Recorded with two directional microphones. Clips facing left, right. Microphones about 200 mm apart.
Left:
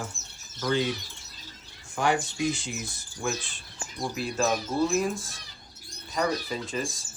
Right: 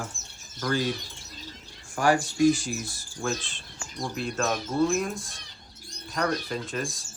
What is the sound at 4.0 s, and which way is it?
Speech, 5° left (ahead or behind).